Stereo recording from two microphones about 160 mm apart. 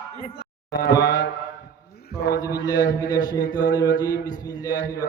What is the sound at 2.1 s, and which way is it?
Speech, 90° left.